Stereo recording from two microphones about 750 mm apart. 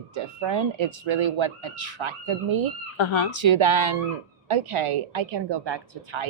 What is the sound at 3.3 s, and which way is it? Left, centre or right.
A woman's voice, right.